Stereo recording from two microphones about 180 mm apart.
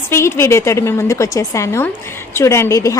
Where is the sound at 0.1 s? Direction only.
15° left (ahead or behind).